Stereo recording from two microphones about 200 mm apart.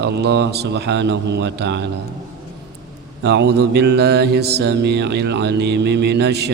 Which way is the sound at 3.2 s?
60° right (ahead or behind).